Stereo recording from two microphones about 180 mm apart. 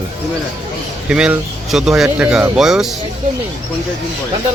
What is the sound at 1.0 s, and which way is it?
A man's voice, 5° right (ahead or behind).